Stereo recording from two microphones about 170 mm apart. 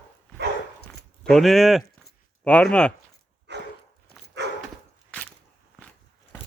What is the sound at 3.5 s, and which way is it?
Dog, 90° right.